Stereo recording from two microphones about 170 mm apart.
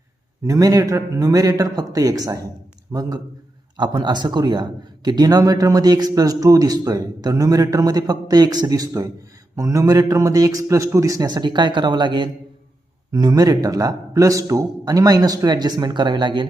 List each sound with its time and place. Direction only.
0.4 s a man's voice: 20° right (ahead or behind)